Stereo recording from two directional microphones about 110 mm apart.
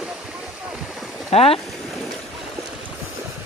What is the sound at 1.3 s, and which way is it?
Boat, 65° left (ahead or behind).